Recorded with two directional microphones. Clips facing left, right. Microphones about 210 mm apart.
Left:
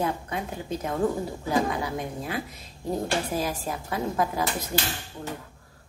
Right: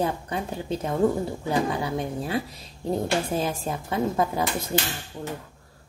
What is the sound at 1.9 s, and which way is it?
Speech, 30° right (ahead or behind).